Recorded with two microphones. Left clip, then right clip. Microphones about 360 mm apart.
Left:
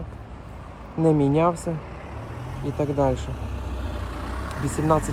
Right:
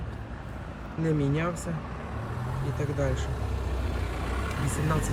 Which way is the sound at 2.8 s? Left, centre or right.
Centre.